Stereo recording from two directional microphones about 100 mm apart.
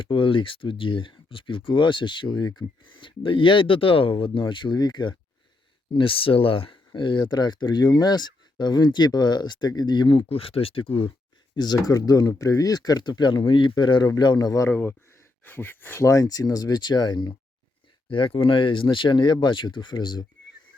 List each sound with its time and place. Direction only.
0.0 s speech: 60° left (ahead or behind)
5.9 s speech: 60° left (ahead or behind)
11.5 s speech: 45° left (ahead or behind)
14.7 s speech: 25° left (ahead or behind)
16.0 s speech: 35° left (ahead or behind)
18.1 s speech: 60° left (ahead or behind)